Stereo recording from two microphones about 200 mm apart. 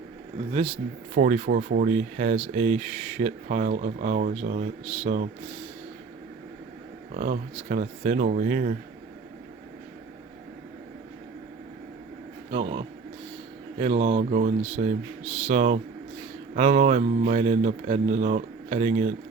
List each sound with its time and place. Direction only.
1.1 s speech: 45° right (ahead or behind)
7.1 s speech: 35° right (ahead or behind)
12.5 s speech: 30° right (ahead or behind)